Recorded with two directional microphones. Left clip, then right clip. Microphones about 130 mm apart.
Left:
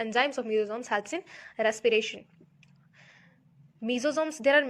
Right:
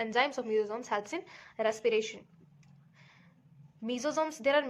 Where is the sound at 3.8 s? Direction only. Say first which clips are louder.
Left 4 dB; 30° left (ahead or behind).